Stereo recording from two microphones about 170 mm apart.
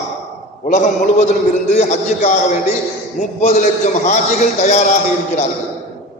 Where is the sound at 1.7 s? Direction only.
45° left (ahead or behind).